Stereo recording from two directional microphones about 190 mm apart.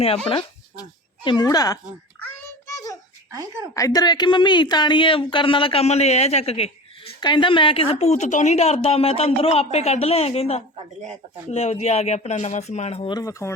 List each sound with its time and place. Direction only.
0.3 s speech: 25° left (ahead or behind)
2.2 s child singing: 15° left (ahead or behind)
3.8 s a woman's voice: 20° left (ahead or behind)